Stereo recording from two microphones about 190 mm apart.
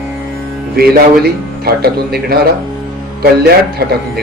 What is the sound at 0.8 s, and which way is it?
A man's voice, 55° right (ahead or behind).